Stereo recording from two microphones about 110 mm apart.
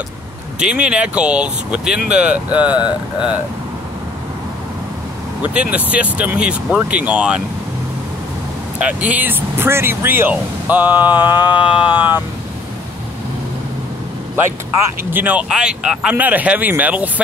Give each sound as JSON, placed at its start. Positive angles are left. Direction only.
{"t": 0.6, "sound": "speech", "side_deg": -10}
{"t": 5.4, "sound": "speech", "side_deg": -10}
{"t": 8.7, "sound": "speech", "side_deg": -15}
{"t": 11.1, "sound": "a sound", "side_deg": 40}
{"t": 15.0, "sound": "speech", "side_deg": -15}